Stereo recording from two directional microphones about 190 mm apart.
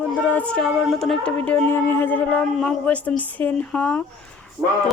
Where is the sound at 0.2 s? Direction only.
10° left (ahead or behind).